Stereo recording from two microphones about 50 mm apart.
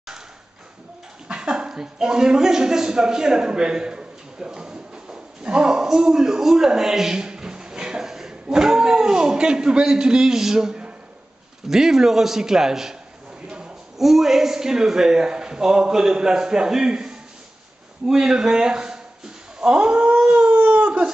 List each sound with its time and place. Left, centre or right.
1.3 s a woman's voice: centre
13.9 s a man's voice: centre
19.6 s dog: centre